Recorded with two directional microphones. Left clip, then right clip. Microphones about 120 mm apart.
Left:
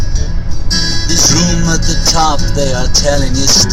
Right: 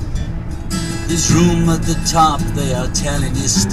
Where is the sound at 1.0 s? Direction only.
35° left (ahead or behind).